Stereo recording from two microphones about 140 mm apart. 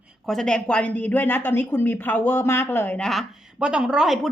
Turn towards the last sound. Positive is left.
turn(degrees=-5)  # may be behind; listen again after turning